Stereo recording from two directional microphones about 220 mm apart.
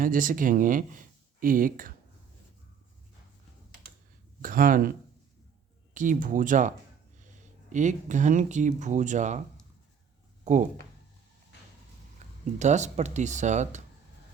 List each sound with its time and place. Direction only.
0.0 s speech: 40° right (ahead or behind)
4.4 s speech: 40° right (ahead or behind)
10.4 s speech: 35° right (ahead or behind)
12.2 s a sound: 30° right (ahead or behind)
12.5 s speech: 30° right (ahead or behind)